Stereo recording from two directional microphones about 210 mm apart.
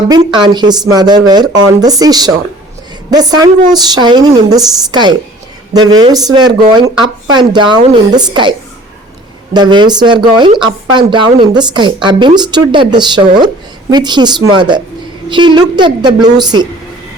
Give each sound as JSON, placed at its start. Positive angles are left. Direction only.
{"t": 0.1, "sound": "speech", "side_deg": -20}